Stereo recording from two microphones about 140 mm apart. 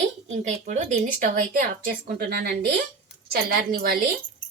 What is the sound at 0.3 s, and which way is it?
A woman's voice, 55° right (ahead or behind).